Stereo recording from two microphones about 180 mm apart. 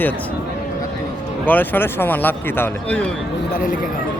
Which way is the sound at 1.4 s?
10° left (ahead or behind).